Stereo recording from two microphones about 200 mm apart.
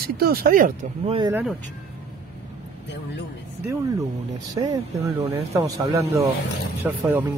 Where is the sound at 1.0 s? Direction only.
25° right (ahead or behind).